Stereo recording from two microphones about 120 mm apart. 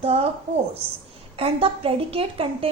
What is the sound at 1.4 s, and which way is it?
A woman's voice, 55° right (ahead or behind).